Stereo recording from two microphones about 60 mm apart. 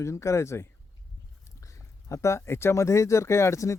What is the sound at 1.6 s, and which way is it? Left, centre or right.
Speech, left.